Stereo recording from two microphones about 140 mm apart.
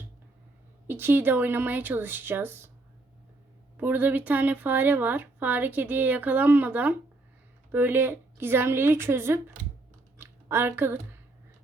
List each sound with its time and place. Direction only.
0.9 s speech: 15° right (ahead or behind)
3.8 s speech: 15° right (ahead or behind)
10.2 s a sound: 15° right (ahead or behind)